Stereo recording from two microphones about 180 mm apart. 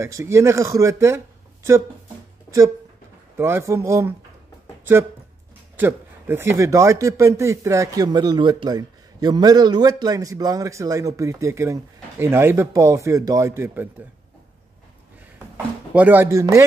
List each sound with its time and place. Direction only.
0.0 s speech: 15° right (ahead or behind)
3.3 s speech: 15° right (ahead or behind)
5.8 s speech: 10° right (ahead or behind)
15.3 s speech: 10° right (ahead or behind)